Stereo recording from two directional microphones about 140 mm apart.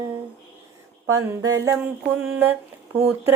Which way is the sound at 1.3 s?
25° right (ahead or behind).